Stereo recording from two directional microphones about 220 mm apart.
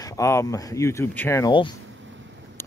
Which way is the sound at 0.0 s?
15° left (ahead or behind).